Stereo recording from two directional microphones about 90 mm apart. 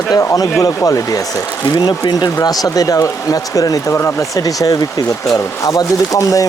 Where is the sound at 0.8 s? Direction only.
40° left (ahead or behind).